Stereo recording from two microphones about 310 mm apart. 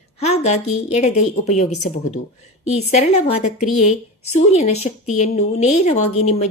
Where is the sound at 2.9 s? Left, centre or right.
Left.